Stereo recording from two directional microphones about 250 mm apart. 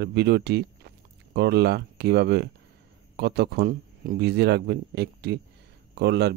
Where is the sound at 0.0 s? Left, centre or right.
Right.